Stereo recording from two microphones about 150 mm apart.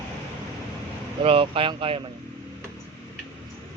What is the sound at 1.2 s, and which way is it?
Speech, 35° right (ahead or behind).